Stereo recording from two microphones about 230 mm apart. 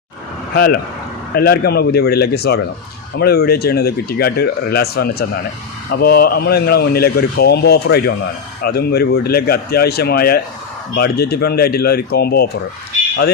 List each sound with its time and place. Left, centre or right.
0.5 s speech: left